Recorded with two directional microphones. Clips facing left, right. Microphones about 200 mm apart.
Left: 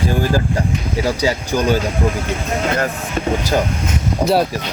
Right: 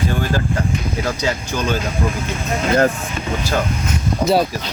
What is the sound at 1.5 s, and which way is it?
Speech, 35° left (ahead or behind).